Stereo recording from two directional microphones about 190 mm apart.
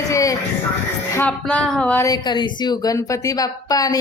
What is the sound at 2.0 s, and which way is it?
Speech, 20° left (ahead or behind).